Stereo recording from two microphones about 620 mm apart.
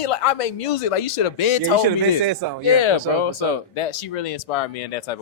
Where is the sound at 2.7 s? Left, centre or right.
Left.